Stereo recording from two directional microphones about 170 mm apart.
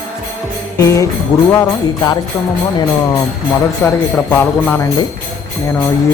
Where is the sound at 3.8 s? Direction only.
10° left (ahead or behind).